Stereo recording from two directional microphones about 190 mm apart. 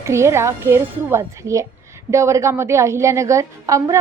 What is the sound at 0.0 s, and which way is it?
A woman's voice, 15° right (ahead or behind).